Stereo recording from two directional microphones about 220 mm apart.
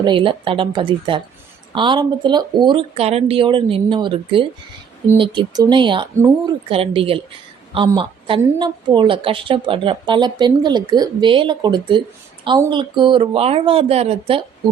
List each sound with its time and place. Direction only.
0.0 s a woman's voice: 20° right (ahead or behind)